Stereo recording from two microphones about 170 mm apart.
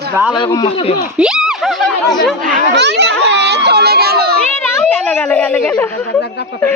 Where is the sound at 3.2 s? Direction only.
90° right; by 4.3 s 70° right (ahead or behind).